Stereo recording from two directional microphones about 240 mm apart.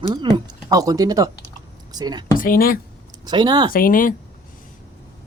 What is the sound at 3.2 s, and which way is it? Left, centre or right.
Speech, centre.